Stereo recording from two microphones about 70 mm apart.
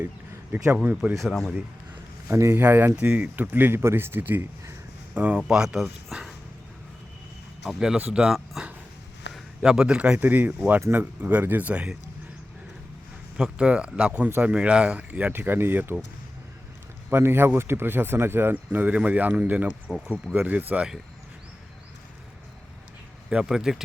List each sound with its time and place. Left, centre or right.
0.8 s speech: right
1.2 s a man's voice: centre
2.2 s speech: right
2.6 s speech: right
5.5 s speech: centre
7.6 s a man's voice: centre
7.9 s speech: centre
10.2 s speech: right
13.3 s speech: centre; by 16.0 s right
17.1 s speech: right
23.3 s speech: centre